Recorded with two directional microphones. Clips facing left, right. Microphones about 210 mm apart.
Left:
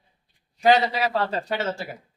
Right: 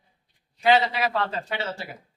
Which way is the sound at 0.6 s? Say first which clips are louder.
Left 2 dB; 40° left (ahead or behind).